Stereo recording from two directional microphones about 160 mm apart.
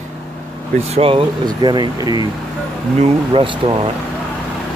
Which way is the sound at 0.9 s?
35° right (ahead or behind).